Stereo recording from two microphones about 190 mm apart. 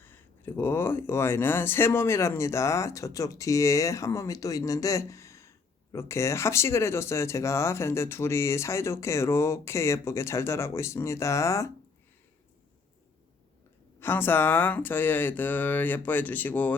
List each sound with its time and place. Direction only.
0.0 s speech: 10° left (ahead or behind)
14.0 s speech: 10° left (ahead or behind)